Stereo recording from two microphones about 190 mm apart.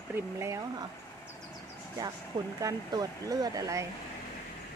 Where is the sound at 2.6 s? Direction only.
20° right (ahead or behind).